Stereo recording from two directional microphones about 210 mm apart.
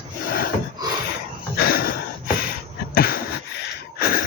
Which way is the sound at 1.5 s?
45° left (ahead or behind).